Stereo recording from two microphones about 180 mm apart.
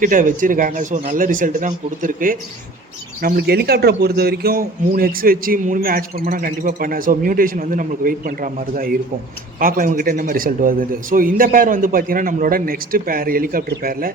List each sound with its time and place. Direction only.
0.0 s a man's voice: 45° right (ahead or behind)
3.2 s a man's voice: 60° right (ahead or behind)